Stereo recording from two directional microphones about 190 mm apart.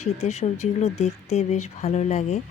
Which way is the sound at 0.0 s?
35° left (ahead or behind).